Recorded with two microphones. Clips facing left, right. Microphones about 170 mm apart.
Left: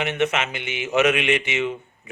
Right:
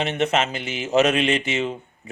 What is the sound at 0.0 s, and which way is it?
Mantra, 30° right (ahead or behind).